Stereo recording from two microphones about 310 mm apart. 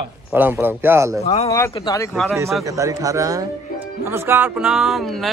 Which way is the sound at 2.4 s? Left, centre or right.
Centre.